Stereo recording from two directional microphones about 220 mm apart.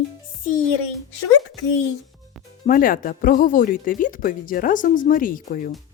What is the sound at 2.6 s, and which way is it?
Speech, 40° left (ahead or behind).